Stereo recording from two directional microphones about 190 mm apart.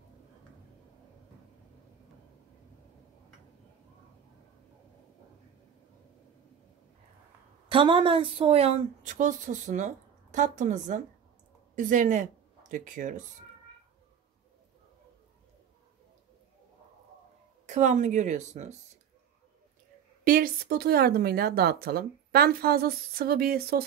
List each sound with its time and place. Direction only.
7.6 s a woman's voice: 25° right (ahead or behind); by 13.2 s 40° right (ahead or behind)
17.6 s a woman's voice: 40° right (ahead or behind)
20.2 s speech: 50° right (ahead or behind)